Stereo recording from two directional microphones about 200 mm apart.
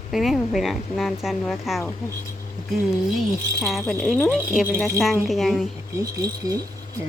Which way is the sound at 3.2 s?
Centre (ahead or behind).